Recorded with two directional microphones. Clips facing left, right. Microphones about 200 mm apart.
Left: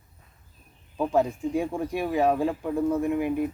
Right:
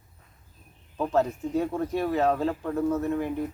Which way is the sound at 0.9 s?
10° left (ahead or behind).